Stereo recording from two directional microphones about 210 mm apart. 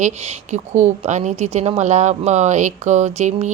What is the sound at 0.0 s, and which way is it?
Speech, 35° right (ahead or behind).